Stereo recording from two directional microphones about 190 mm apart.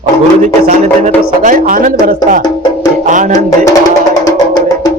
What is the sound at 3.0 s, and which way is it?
Music, 40° right (ahead or behind).